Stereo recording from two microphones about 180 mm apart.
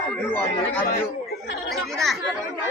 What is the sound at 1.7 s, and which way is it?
Chatter, centre (ahead or behind).